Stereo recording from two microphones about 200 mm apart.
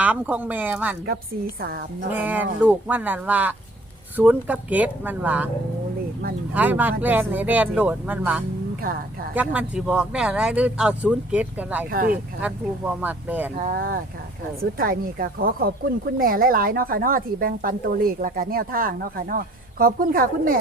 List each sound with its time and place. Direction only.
0.0 s speech: 10° right (ahead or behind)
2.1 s speech: 10° right (ahead or behind)
6.5 s speech: 10° right (ahead or behind)
11.9 s a woman's voice: 45° right (ahead or behind)
12.4 s speech: 10° right (ahead or behind)
13.6 s a woman's voice: 45° right (ahead or behind)